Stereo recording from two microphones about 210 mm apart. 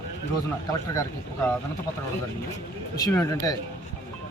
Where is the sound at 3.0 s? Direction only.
15° left (ahead or behind).